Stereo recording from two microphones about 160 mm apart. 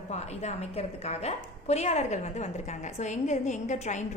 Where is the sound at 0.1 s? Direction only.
45° left (ahead or behind).